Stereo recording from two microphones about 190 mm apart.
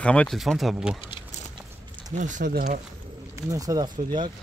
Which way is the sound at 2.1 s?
40° right (ahead or behind).